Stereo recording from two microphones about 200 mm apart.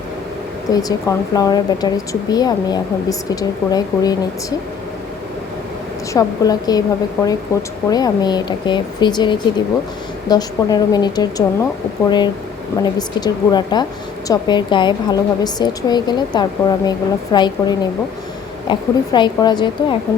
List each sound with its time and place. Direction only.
0.7 s a woman's voice: 20° left (ahead or behind)
6.1 s a woman's voice: 20° left (ahead or behind)